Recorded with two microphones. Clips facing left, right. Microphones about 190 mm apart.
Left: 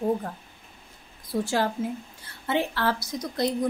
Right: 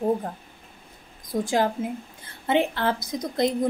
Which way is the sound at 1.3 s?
40° right (ahead or behind).